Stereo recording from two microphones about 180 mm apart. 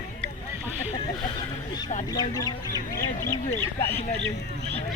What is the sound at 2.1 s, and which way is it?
Speech, 20° left (ahead or behind).